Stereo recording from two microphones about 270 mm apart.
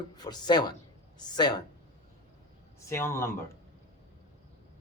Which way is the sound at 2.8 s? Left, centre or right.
Centre.